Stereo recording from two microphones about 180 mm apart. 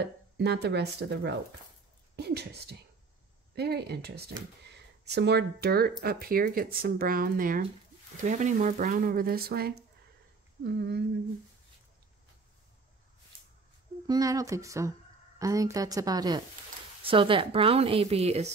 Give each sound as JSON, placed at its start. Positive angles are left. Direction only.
{"t": 0.0, "sound": "speech", "side_deg": -70}
{"t": 14.0, "sound": "a woman's voice", "side_deg": -20}